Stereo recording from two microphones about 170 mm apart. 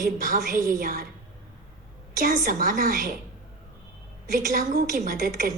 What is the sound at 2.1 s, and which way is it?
Speech, 55° right (ahead or behind).